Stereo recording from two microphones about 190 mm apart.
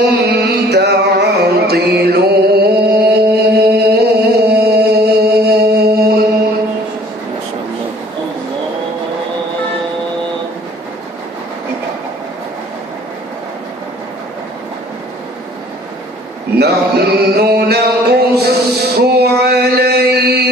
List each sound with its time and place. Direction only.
0.0 s music: 65° right (ahead or behind)
16.5 s a sound: 60° right (ahead or behind)
18.9 s music: 60° right (ahead or behind)